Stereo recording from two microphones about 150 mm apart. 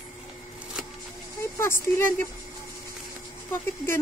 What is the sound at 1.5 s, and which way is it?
Speech, 15° left (ahead or behind).